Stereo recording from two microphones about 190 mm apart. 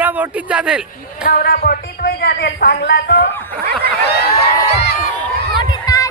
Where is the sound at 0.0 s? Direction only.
10° right (ahead or behind).